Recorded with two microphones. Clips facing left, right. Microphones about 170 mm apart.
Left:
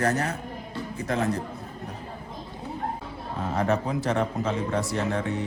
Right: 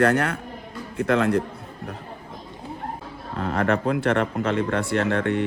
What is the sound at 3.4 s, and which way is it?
Speech, 65° right (ahead or behind).